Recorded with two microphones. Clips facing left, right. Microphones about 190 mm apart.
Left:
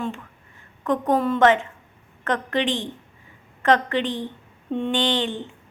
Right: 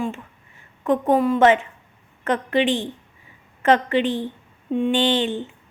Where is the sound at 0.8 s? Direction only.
20° right (ahead or behind).